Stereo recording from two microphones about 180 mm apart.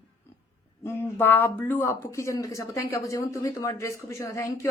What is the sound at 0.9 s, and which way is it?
A woman's voice, 10° left (ahead or behind).